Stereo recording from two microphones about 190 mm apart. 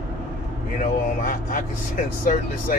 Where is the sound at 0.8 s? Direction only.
45° left (ahead or behind).